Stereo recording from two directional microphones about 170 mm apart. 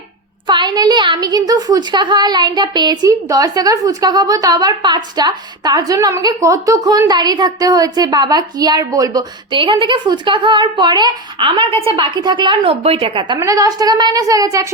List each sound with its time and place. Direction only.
0.4 s a woman's voice: 25° right (ahead or behind)